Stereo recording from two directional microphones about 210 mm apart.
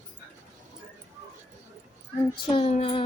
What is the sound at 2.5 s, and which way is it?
Child singing, 30° left (ahead or behind).